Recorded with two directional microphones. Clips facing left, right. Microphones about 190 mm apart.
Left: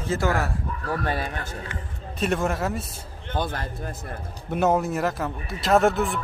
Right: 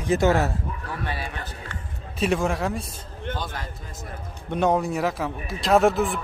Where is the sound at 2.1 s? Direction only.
Centre (ahead or behind).